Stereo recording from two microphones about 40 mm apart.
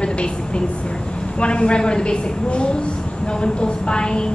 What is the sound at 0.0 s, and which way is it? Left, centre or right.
A woman's voice, left.